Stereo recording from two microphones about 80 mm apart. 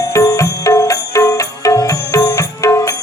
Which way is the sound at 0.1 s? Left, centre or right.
Left.